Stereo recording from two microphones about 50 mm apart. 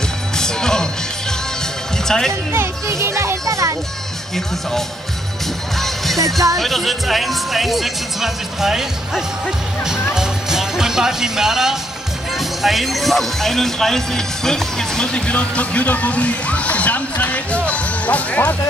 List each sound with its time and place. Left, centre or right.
0.4 s music: centre
2.0 s speech: centre
2.5 s a child's voice: right
5.8 s music: centre
6.6 s speech: centre
10.1 s music: centre
12.4 s speech: centre; by 18.6 s left